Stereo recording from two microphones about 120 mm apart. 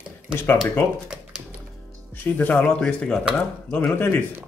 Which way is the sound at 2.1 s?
15° left (ahead or behind).